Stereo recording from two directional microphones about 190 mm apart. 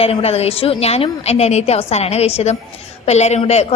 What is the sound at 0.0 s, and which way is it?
A woman's voice, 30° left (ahead or behind).